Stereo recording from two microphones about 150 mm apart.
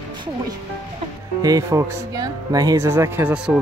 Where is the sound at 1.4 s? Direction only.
25° right (ahead or behind).